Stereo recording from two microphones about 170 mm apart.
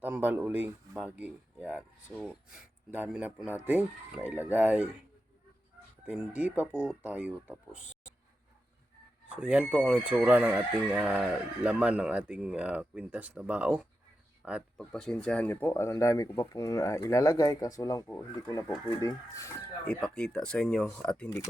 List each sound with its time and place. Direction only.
0.0 s speech: 10° right (ahead or behind)
6.1 s speech: 5° right (ahead or behind)
9.3 s speech: 5° right (ahead or behind); by 18.0 s 20° left (ahead or behind)
18.0 s speech: 10° left (ahead or behind)
19.9 s speech: 5° left (ahead or behind)